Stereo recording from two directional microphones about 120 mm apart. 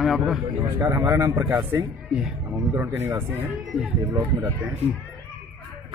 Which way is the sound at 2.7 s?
20° right (ahead or behind).